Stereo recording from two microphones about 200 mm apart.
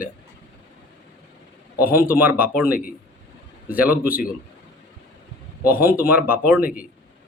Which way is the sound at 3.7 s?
10° right (ahead or behind).